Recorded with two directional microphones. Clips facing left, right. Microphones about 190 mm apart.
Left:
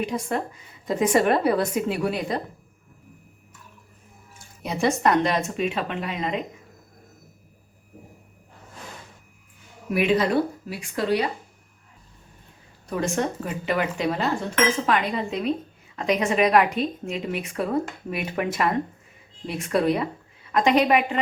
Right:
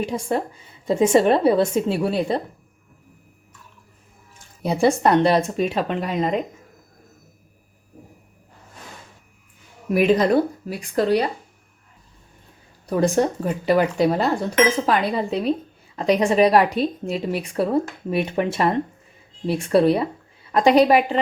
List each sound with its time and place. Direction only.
0.0 s a woman's voice: 30° right (ahead or behind)
4.6 s speech: 30° right (ahead or behind)
9.9 s speech: 40° right (ahead or behind)
13.0 s a woman's voice: 35° right (ahead or behind)